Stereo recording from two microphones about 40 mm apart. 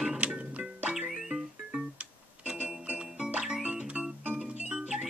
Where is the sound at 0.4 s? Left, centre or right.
Right.